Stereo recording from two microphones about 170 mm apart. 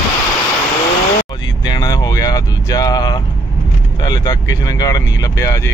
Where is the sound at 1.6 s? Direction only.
25° left (ahead or behind).